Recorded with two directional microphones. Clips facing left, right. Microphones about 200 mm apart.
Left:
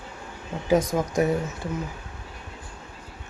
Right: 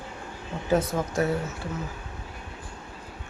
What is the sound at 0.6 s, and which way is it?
Speech, 15° left (ahead or behind).